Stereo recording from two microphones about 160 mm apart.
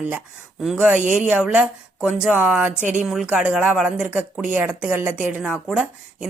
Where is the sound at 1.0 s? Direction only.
50° right (ahead or behind).